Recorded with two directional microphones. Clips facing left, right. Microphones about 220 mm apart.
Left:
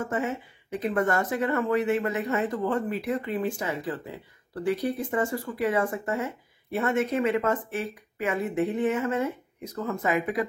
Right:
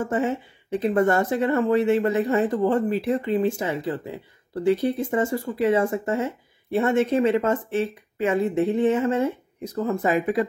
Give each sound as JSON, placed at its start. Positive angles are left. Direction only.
{"t": 0.0, "sound": "speech", "side_deg": -30}